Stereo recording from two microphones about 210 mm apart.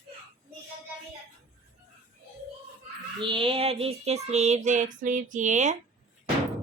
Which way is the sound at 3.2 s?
25° right (ahead or behind).